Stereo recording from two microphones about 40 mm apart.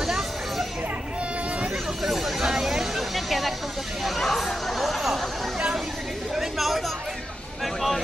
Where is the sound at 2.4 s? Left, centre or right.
Centre.